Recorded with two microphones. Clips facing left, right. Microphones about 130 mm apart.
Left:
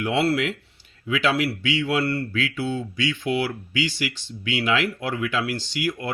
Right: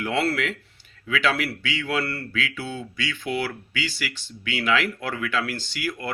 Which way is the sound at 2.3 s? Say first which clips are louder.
Left 4 dB; 25° left (ahead or behind).